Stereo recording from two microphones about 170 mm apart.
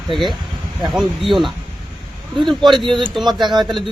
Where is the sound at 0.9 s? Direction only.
Centre (ahead or behind).